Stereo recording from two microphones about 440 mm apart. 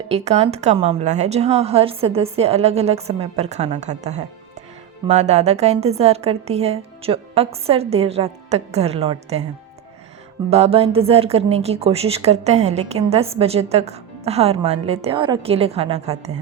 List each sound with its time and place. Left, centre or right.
0.1 s a woman's voice: centre
10.5 s a woman's voice: centre